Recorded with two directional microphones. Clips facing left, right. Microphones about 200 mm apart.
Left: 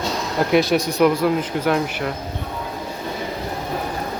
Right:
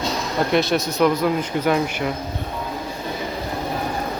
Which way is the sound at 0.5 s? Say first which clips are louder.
Left 3 dB; 10° left (ahead or behind).